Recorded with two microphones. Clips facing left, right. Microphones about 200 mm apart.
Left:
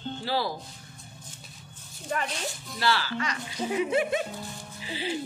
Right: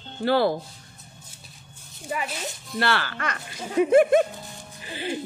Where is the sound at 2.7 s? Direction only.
60° right (ahead or behind).